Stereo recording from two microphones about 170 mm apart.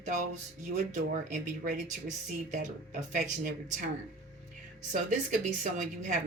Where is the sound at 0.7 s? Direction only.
45° right (ahead or behind).